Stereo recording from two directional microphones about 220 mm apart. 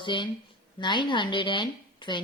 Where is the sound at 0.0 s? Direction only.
20° left (ahead or behind).